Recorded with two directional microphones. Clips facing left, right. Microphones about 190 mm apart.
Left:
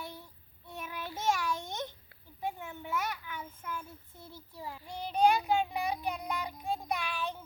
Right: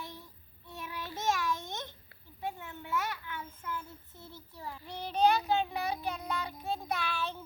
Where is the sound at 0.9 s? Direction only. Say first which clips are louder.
Left 1 dB; 10° left (ahead or behind).